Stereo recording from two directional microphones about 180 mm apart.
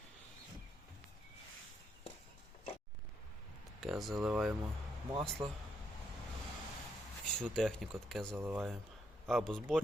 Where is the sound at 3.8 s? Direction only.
Centre (ahead or behind).